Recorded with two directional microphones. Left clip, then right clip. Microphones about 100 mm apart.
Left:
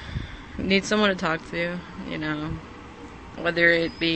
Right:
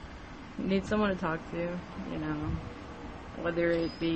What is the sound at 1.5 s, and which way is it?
Speech, 10° left (ahead or behind).